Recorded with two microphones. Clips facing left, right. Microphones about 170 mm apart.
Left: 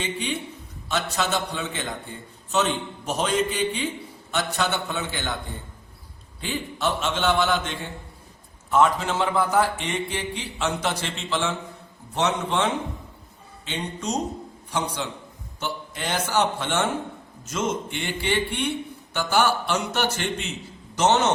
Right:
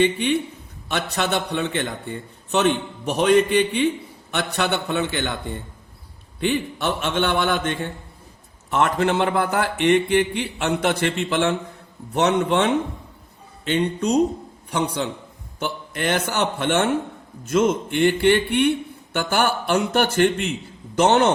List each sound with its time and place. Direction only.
0.0 s a man's voice: 60° right (ahead or behind)